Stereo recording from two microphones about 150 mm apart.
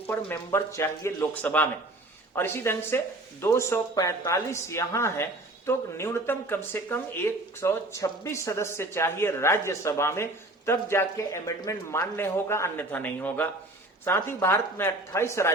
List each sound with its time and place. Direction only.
0.1 s speech: 15° left (ahead or behind)